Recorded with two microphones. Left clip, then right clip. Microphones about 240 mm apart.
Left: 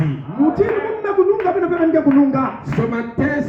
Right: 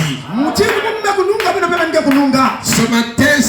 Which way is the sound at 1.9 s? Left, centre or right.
Right.